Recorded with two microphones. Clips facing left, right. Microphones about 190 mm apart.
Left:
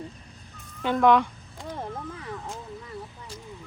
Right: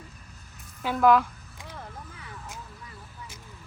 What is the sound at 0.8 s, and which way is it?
Speech, 5° right (ahead or behind).